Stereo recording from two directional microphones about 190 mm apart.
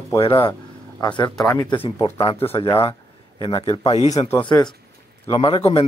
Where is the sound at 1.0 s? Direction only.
20° left (ahead or behind).